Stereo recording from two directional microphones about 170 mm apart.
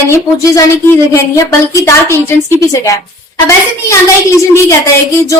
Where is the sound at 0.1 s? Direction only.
20° left (ahead or behind).